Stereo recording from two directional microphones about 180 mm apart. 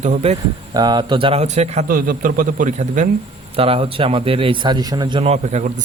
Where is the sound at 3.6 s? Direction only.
30° right (ahead or behind).